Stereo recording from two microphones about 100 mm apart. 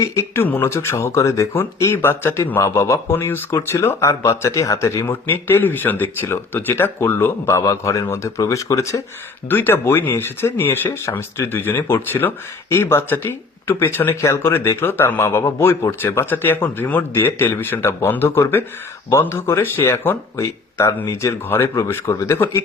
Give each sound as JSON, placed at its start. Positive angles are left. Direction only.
{"t": 0.0, "sound": "speech", "side_deg": 30}